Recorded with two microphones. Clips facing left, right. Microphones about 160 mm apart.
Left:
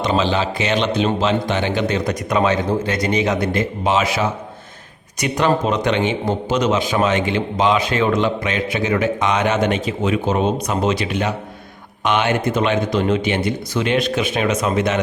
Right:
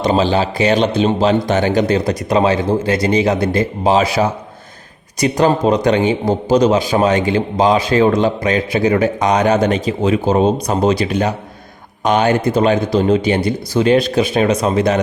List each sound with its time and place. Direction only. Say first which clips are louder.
0.0 s a man's voice: right 4 dB; 35° right (ahead or behind)